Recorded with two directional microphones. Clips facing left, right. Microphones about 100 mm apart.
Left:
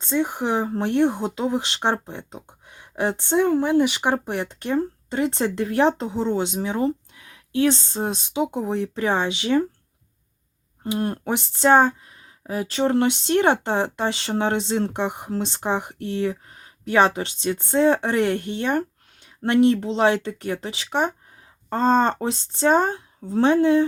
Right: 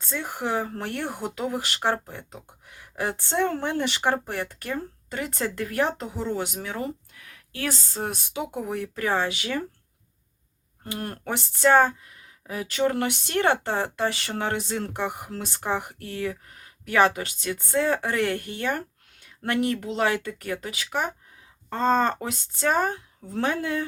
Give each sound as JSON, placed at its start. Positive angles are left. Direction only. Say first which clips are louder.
{"t": 0.0, "sound": "speech", "louder": "left 7 dB", "side_deg": 20}
{"t": 10.8, "sound": "speech", "louder": "left 7 dB", "side_deg": 20}